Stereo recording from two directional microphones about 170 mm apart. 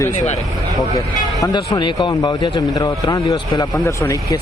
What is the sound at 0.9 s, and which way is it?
Speech, 20° left (ahead or behind).